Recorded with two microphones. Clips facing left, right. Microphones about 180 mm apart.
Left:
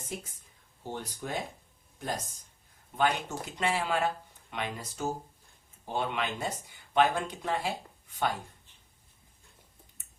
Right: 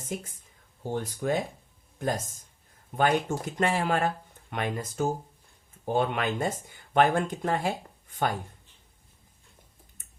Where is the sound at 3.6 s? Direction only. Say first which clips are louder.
Right 3 dB; 45° right (ahead or behind).